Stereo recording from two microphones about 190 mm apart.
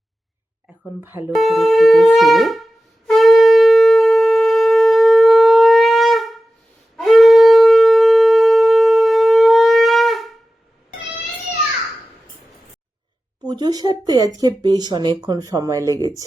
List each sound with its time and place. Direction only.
1.4 s wind instrument: centre (ahead or behind)
3.1 s shofar: centre (ahead or behind)
13.4 s speech: 20° right (ahead or behind)